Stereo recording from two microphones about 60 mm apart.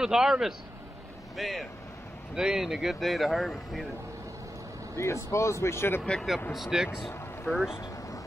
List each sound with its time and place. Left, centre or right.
0.0 s speech: centre
4.9 s speech: left
6.5 s speech: centre